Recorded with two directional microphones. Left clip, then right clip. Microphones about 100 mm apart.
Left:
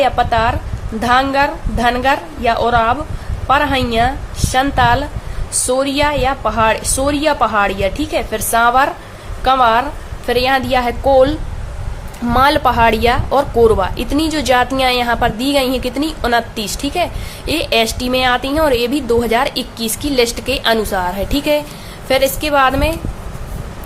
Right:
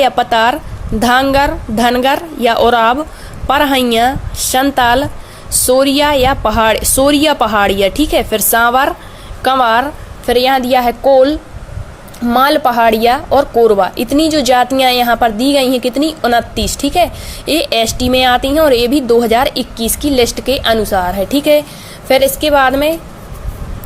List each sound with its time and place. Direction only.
0.0 s a woman's voice: 60° right (ahead or behind); by 11.3 s 30° right (ahead or behind)
12.4 s a woman's voice: 30° right (ahead or behind)